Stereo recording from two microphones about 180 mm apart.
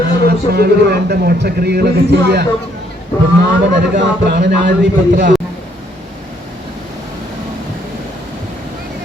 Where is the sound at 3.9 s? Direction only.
75° right (ahead or behind).